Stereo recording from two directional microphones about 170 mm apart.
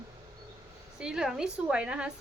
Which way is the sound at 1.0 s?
5° right (ahead or behind).